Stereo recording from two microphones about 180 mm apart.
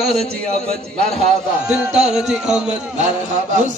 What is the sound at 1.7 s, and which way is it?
Speech, 5° right (ahead or behind).